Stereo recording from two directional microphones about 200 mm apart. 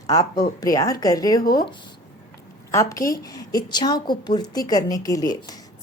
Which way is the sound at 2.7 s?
15° left (ahead or behind).